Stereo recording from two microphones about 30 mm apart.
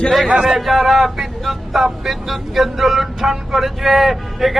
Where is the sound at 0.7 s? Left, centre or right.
Centre.